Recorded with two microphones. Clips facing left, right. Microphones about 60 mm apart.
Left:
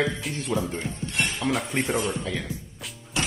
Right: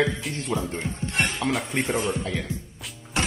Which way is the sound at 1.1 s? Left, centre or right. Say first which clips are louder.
Right 2 dB; right.